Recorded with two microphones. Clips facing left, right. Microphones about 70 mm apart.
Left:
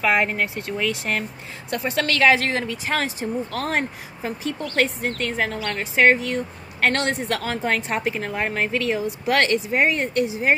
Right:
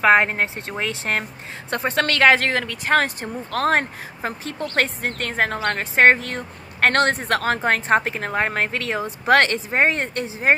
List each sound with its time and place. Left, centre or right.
0.0 s a woman's voice: right